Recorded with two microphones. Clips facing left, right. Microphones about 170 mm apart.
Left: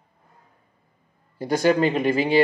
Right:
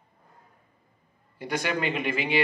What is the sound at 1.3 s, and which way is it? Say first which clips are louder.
Speech: left 9 dB; 40° left (ahead or behind).